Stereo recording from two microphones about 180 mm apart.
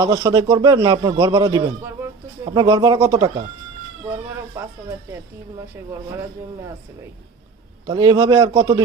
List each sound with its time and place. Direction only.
0.0 s a man's voice: 20° right (ahead or behind)
7.9 s a man's voice: 20° right (ahead or behind)